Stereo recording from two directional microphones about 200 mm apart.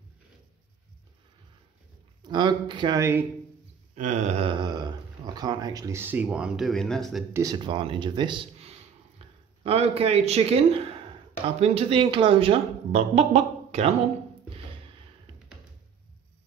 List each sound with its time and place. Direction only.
2.2 s speech: 20° right (ahead or behind)
3.9 s speech: 35° right (ahead or behind); by 7.2 s centre (ahead or behind)
7.3 s speech: 20° right (ahead or behind)